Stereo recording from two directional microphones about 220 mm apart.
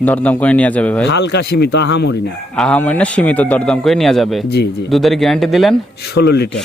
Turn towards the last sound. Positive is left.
turn(degrees=45)  # may be behind; listen again after turning